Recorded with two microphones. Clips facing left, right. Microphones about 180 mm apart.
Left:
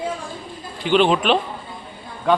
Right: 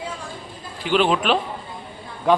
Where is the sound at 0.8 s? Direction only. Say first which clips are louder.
Left 3 dB; centre (ahead or behind).